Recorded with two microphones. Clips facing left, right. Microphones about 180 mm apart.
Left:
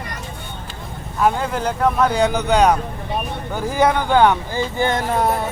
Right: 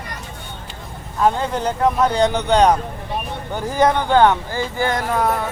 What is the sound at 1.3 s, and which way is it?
Speech, 5° left (ahead or behind).